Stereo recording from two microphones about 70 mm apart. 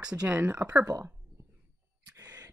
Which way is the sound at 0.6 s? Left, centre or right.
Right.